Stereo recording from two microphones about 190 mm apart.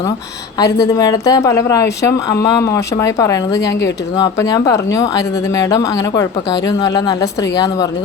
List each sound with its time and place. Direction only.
0.6 s speech: 20° left (ahead or behind)